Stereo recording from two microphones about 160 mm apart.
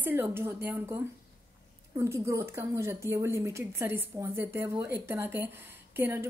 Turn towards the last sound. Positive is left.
turn(degrees=-15)  # may be behind; listen again after turning